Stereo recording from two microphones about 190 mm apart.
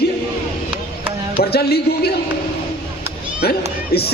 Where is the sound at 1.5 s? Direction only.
55° left (ahead or behind).